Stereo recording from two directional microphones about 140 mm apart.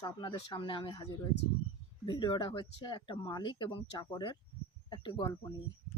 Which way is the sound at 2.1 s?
35° left (ahead or behind).